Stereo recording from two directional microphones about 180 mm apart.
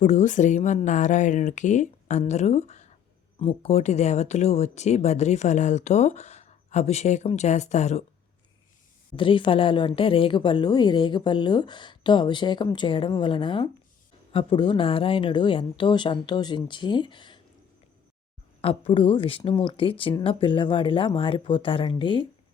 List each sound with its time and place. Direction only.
0.0 s speech: 40° left (ahead or behind)
9.1 s a woman's voice: 30° left (ahead or behind)
18.6 s a woman's voice: 30° left (ahead or behind)